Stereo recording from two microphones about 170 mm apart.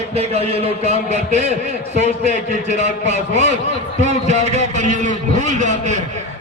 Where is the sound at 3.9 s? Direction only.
45° right (ahead or behind).